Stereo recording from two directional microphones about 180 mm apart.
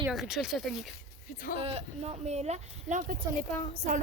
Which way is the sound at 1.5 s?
35° right (ahead or behind).